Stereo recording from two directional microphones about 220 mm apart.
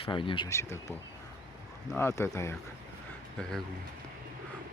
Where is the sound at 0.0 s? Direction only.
20° left (ahead or behind).